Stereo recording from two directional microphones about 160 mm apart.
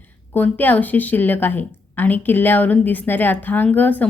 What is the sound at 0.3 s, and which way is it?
A woman's voice, 10° left (ahead or behind).